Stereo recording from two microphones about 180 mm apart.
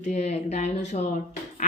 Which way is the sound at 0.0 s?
35° left (ahead or behind).